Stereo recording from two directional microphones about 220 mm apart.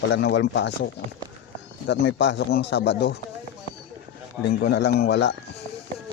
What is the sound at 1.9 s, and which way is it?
Speech, 55° left (ahead or behind).